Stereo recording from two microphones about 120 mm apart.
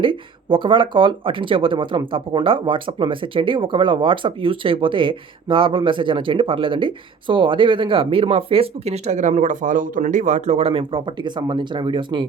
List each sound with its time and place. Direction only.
0.0 s speech: 45° right (ahead or behind)